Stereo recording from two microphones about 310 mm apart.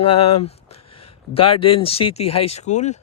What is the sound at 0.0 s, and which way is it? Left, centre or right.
Speech, centre.